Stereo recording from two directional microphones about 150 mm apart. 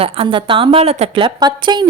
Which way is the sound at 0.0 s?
35° right (ahead or behind).